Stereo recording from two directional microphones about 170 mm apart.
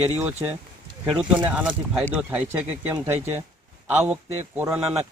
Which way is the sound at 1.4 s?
5° right (ahead or behind).